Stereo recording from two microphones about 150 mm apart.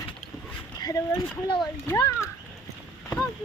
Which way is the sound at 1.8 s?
20° left (ahead or behind).